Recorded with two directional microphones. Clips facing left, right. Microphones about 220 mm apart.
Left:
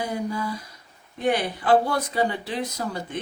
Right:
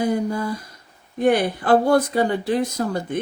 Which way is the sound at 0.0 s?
50° right (ahead or behind).